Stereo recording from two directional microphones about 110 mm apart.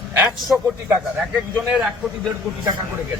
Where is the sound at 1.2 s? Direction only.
10° right (ahead or behind).